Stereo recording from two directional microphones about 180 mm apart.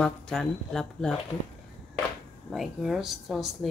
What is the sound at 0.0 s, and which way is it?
Speech, 5° left (ahead or behind).